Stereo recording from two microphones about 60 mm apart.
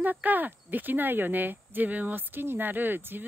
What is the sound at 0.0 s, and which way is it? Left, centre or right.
Speech, right.